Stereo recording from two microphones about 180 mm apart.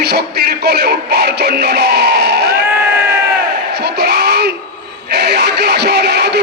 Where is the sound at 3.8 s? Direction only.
65° right (ahead or behind).